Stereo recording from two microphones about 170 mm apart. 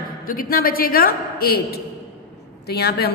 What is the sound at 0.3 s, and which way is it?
A woman's voice, 55° left (ahead or behind).